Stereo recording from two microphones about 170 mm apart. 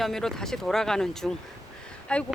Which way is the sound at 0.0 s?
Centre (ahead or behind).